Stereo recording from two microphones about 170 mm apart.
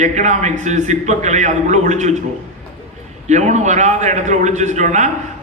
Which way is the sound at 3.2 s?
45° right (ahead or behind).